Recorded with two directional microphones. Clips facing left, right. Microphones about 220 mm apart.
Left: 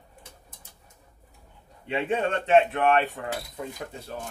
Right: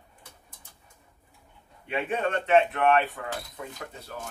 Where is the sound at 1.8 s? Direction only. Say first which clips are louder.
Left 2 dB; 25° left (ahead or behind).